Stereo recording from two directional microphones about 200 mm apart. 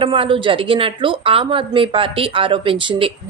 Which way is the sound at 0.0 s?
25° right (ahead or behind).